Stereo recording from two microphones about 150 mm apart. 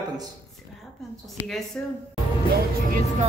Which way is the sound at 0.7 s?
Centre (ahead or behind).